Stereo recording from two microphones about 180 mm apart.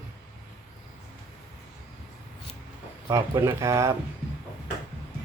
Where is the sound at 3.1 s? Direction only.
20° right (ahead or behind).